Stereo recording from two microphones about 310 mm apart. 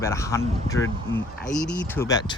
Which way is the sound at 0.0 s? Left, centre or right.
Centre.